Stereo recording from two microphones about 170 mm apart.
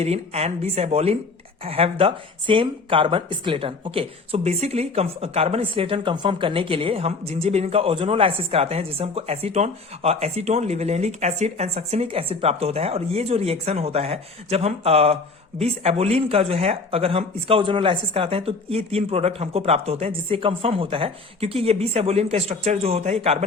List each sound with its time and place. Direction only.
0.0 s speech: 40° right (ahead or behind)